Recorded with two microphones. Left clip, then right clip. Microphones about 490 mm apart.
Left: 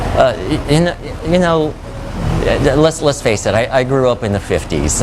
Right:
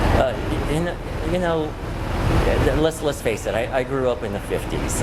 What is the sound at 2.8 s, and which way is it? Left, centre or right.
Speech, left.